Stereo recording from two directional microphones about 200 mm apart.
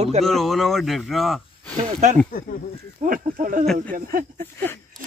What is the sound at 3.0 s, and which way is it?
Speech, 45° right (ahead or behind).